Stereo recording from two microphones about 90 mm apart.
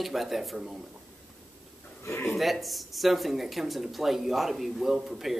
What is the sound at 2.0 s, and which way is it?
Speech, 25° left (ahead or behind).